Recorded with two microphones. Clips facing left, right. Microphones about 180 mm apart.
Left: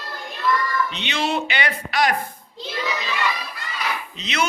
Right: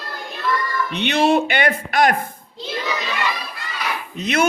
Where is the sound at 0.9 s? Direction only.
55° right (ahead or behind).